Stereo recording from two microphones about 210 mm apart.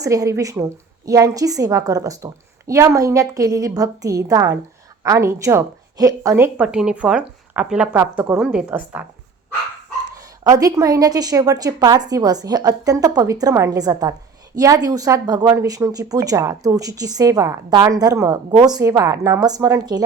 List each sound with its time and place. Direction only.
0.0 s a woman's voice: 15° right (ahead or behind)
10.4 s a woman's voice: 15° right (ahead or behind)